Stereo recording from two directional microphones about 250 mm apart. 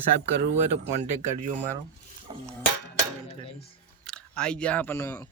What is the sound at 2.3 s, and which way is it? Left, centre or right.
Cutlery, right.